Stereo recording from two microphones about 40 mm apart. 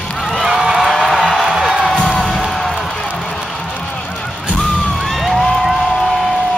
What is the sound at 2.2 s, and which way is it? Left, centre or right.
Music, centre.